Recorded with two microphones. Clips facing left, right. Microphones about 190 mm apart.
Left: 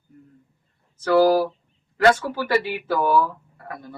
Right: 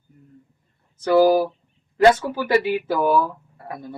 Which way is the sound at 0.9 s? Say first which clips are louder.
Right 1 dB; 15° right (ahead or behind).